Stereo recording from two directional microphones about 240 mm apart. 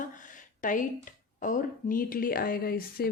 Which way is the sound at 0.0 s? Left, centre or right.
Left.